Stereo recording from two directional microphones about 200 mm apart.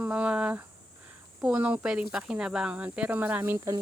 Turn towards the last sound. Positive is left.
turn(degrees=-15)  # may be behind; listen again after turning